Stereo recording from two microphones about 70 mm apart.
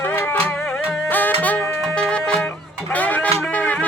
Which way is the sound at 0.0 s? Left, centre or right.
Left.